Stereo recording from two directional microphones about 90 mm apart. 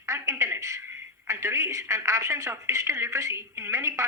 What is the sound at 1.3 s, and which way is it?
Speech, 30° right (ahead or behind).